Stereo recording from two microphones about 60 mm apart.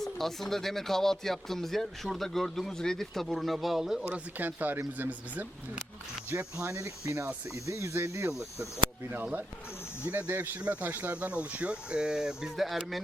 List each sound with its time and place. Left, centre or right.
0.0 s speech: centre
4.1 s speech: right
6.3 s speech: right
10.1 s speech: right; by 12.5 s centre
12.5 s speech: centre